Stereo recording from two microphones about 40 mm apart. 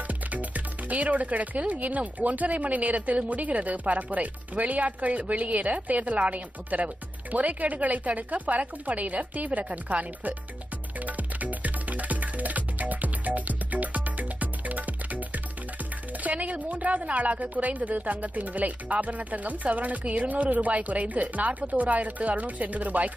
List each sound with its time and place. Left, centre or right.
0.3 s music: right
1.7 s speech: right
11.1 s music: right
16.2 s speech: right